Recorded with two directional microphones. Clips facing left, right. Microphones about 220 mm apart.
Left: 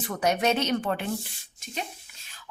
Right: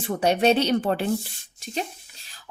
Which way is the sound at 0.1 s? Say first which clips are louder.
Right 5 dB; 30° right (ahead or behind).